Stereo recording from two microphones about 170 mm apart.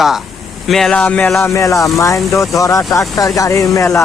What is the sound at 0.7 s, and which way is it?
Speech, 5° left (ahead or behind).